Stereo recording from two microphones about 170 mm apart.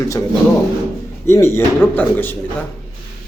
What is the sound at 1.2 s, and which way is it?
Speech, 15° left (ahead or behind).